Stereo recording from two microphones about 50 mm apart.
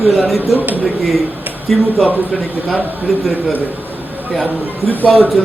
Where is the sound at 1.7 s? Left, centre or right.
Centre.